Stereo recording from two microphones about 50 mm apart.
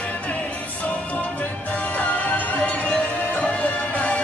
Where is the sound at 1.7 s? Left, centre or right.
Left.